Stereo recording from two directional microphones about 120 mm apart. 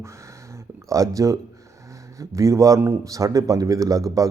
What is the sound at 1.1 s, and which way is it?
Speech, 25° right (ahead or behind).